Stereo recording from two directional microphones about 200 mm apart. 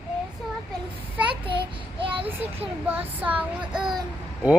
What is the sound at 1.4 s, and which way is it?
Child singing, 25° right (ahead or behind).